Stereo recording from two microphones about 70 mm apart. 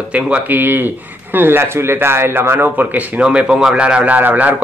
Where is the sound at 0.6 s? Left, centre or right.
Right.